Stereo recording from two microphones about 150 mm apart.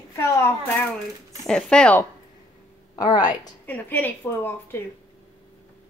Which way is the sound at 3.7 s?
10° left (ahead or behind).